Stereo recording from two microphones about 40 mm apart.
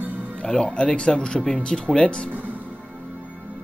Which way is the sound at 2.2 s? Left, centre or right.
Right.